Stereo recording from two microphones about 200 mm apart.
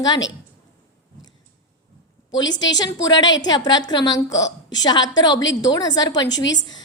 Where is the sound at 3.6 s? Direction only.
20° left (ahead or behind).